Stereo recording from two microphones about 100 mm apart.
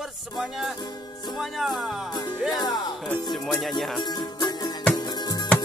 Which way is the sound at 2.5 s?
45° left (ahead or behind).